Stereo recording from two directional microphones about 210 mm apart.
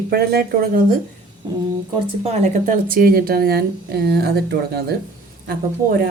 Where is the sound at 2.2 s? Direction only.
30° right (ahead or behind); by 4.9 s 50° right (ahead or behind).